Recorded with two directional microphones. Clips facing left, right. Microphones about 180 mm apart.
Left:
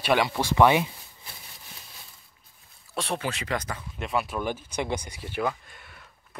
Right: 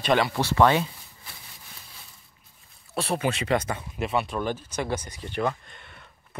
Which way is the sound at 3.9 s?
Centre (ahead or behind).